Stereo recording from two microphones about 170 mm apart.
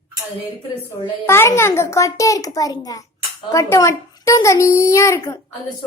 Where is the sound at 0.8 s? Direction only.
15° left (ahead or behind).